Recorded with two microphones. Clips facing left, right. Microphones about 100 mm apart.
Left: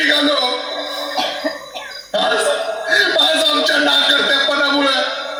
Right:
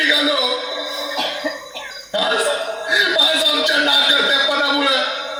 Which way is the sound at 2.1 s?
25° left (ahead or behind).